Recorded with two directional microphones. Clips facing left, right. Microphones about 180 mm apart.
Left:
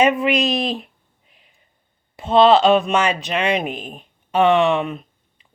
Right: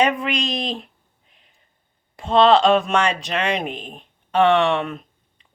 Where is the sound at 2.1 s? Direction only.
5° left (ahead or behind).